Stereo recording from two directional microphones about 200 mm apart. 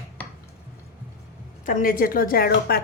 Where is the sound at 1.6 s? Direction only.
45° left (ahead or behind).